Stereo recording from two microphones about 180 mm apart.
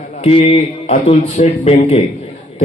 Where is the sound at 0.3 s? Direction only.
35° left (ahead or behind).